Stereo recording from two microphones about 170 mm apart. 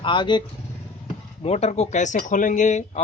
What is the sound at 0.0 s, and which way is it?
Speech, 30° left (ahead or behind).